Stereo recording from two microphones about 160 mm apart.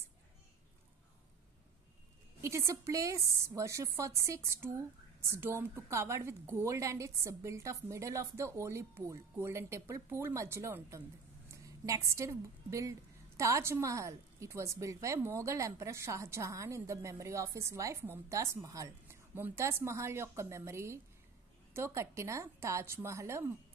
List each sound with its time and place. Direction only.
2.4 s a woman's voice: 20° right (ahead or behind)